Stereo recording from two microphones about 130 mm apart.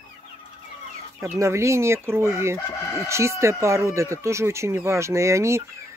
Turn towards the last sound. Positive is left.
turn(degrees=-20)  # may be behind; listen again after turning